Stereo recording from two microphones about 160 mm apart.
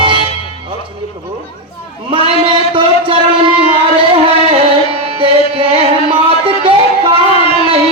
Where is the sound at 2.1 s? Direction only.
35° right (ahead or behind).